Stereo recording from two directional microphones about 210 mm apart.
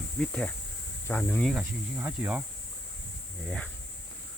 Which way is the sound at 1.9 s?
10° right (ahead or behind).